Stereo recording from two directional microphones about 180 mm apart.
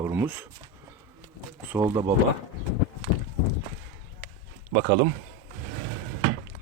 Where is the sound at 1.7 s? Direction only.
10° right (ahead or behind).